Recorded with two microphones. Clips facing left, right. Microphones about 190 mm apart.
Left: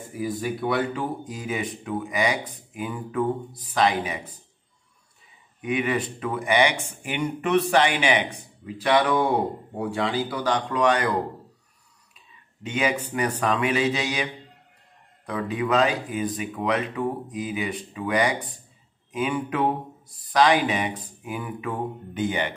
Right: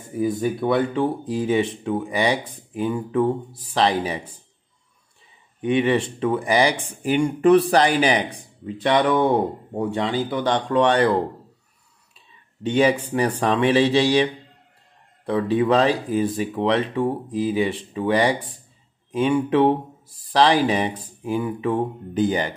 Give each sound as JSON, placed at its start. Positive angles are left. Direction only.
{"t": 0.7, "sound": "speech", "side_deg": -25}
{"t": 5.6, "sound": "speech", "side_deg": -30}
{"t": 12.6, "sound": "speech", "side_deg": -35}